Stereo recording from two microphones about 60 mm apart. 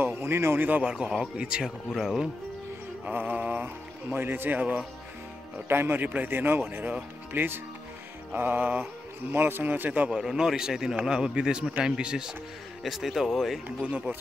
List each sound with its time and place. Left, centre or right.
0.0 s a sound: right
0.7 s a man's voice: right
3.1 s speech: right
8.4 s music: right
9.3 s speech: right
10.1 s a man's voice: centre
12.8 s speech: centre